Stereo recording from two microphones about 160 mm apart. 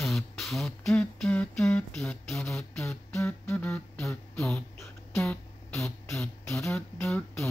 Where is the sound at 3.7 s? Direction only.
5° left (ahead or behind).